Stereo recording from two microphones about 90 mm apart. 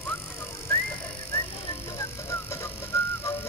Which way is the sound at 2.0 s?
30° left (ahead or behind).